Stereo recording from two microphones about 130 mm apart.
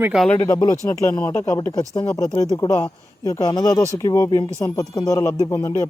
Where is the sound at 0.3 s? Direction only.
30° left (ahead or behind).